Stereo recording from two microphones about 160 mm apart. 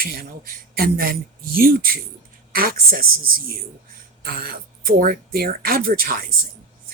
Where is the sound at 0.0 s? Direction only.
65° right (ahead or behind).